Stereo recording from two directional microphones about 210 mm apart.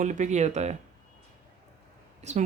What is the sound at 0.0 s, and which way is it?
Speech, 35° right (ahead or behind).